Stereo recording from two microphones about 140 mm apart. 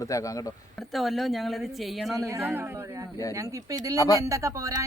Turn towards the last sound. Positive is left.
turn(degrees=-25)  # may be behind; listen again after turning